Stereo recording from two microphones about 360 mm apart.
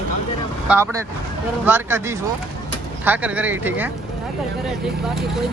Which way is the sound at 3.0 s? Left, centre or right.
Centre.